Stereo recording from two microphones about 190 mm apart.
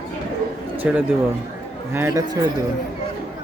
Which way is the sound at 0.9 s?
5° right (ahead or behind).